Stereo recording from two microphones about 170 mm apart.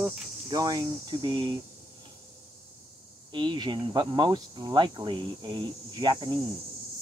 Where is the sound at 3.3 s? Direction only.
25° right (ahead or behind).